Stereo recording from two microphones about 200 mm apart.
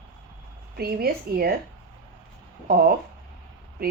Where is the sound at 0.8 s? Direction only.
50° right (ahead or behind).